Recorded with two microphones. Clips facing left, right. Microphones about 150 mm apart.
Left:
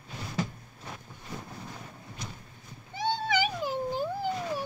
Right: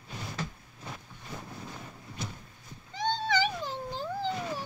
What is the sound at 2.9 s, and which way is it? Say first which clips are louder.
Cat: even; 10° left (ahead or behind).